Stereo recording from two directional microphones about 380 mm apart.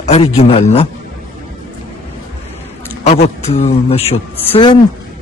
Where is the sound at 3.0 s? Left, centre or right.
Centre.